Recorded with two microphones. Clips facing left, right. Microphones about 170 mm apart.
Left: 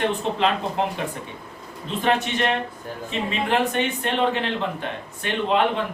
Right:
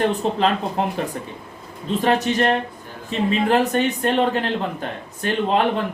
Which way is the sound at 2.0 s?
40° right (ahead or behind).